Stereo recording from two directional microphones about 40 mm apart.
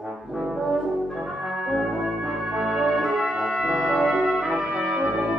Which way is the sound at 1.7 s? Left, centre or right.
Centre.